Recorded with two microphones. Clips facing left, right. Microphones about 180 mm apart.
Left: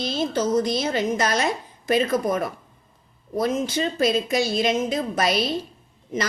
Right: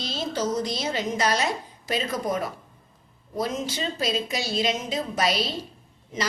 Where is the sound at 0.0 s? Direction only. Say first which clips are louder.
Left 4 dB; 55° left (ahead or behind).